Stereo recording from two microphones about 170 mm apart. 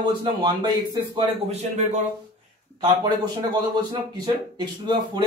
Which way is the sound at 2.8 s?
25° right (ahead or behind).